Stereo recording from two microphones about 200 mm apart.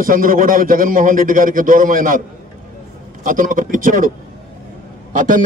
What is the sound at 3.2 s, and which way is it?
Speech, 40° right (ahead or behind).